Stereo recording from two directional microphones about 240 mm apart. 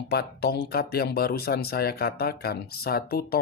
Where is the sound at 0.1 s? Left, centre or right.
Left.